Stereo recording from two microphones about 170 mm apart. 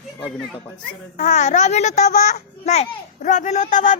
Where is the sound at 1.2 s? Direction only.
45° left (ahead or behind).